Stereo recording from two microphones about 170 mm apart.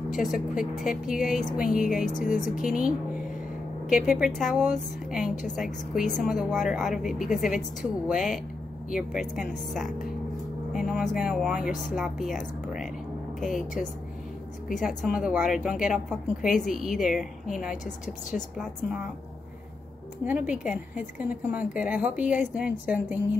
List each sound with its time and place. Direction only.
0.1 s speech: centre (ahead or behind)
2.0 s speech: 50° left (ahead or behind)
3.9 s speech: 5° right (ahead or behind)
20.2 s a woman's voice: 10° right (ahead or behind)